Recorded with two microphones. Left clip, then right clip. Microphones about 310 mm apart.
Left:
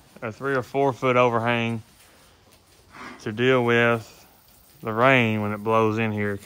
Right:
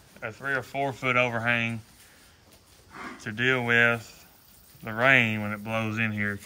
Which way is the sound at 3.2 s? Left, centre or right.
Centre.